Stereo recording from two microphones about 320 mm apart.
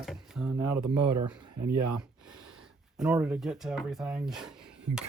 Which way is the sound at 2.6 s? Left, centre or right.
Centre.